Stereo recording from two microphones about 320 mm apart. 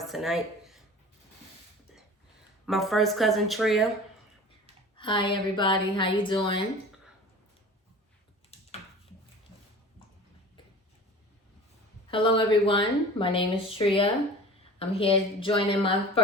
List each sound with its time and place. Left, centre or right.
0.1 s speech: centre
2.6 s speech: centre
4.9 s speech: centre
12.1 s speech: centre